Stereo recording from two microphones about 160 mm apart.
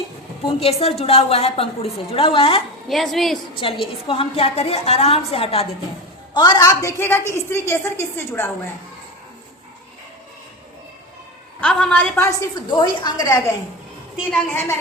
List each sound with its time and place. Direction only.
0.6 s a woman's voice: 40° left (ahead or behind)
2.9 s a woman's voice: centre (ahead or behind)
3.5 s a woman's voice: 35° left (ahead or behind)
6.3 s a woman's voice: 25° left (ahead or behind)
11.6 s a woman's voice: 5° left (ahead or behind)
12.7 s a woman's voice: 30° left (ahead or behind)